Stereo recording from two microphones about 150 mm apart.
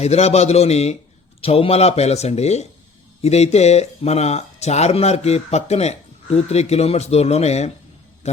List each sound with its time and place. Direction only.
0.0 s speech: 45° left (ahead or behind)